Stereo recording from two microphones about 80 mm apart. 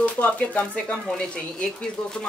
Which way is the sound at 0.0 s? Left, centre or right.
Centre.